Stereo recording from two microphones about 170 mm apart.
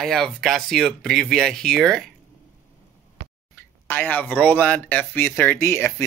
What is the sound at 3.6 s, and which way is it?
Speech, 10° left (ahead or behind).